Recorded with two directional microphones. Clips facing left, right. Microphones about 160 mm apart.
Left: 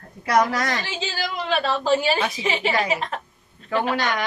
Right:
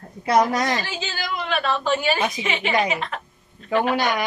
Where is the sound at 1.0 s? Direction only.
30° left (ahead or behind).